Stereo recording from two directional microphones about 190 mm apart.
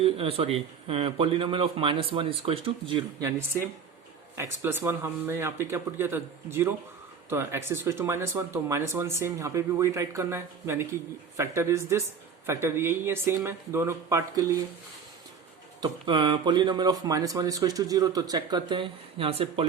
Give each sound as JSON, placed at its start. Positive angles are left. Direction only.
{"t": 0.0, "sound": "speech", "side_deg": -30}
{"t": 15.8, "sound": "speech", "side_deg": -25}